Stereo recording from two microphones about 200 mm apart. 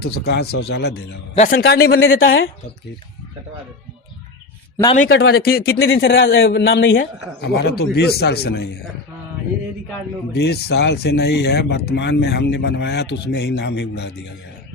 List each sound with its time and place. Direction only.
0.0 s speech: 55° left (ahead or behind)
2.0 s speech: 90° left
5.2 s speech: 50° left (ahead or behind); by 7.0 s 70° left (ahead or behind)
7.0 s speech: 55° left (ahead or behind)
10.3 s speech: 55° left (ahead or behind)